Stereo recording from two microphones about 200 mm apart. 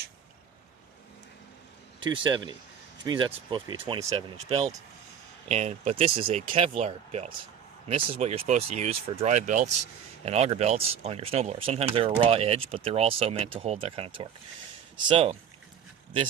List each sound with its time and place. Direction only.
2.0 s speech: 25° right (ahead or behind)